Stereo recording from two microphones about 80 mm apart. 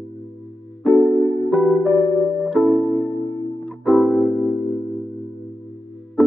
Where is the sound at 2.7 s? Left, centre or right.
Centre.